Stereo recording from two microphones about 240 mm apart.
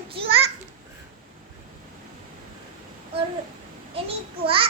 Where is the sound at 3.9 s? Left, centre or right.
Right.